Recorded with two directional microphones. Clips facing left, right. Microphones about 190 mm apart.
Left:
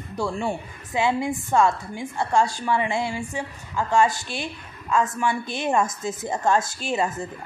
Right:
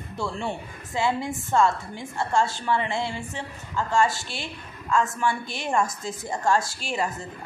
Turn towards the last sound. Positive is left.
turn(degrees=20)  # may be behind; listen again after turning